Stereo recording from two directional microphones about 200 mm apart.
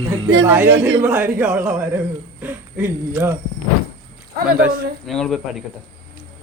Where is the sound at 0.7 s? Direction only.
60° right (ahead or behind).